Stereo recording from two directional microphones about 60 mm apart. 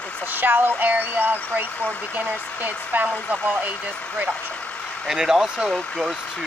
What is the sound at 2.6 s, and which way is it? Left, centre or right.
Speech, right.